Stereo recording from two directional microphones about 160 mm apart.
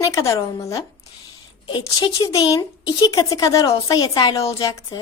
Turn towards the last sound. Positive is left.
turn(degrees=20)  # may be behind; listen again after turning